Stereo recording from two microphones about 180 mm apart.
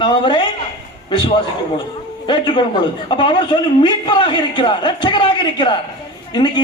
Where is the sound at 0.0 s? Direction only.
25° left (ahead or behind).